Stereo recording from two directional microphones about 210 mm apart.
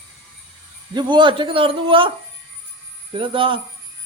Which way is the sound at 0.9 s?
20° right (ahead or behind).